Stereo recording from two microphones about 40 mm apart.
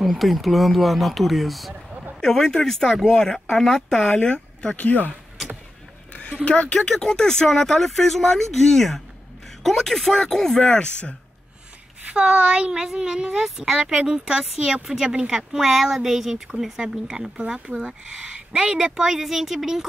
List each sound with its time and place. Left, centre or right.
0.0 s speech: centre
2.2 s speech: centre
4.1 s speech: left
4.7 s speech: left
6.4 s speech: left
6.9 s speech: centre
10.7 s speech: left
12.1 s a woman's voice: right
15.3 s speech: centre
17.4 s a woman's voice: right
18.9 s speech: centre